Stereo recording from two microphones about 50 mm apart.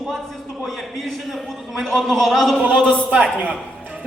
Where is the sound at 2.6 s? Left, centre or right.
Right.